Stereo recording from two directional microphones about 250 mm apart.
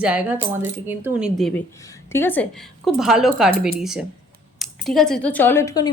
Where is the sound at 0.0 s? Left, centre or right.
Centre.